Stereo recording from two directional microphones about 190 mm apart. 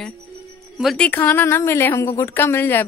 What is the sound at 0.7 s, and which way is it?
A woman's voice, centre (ahead or behind).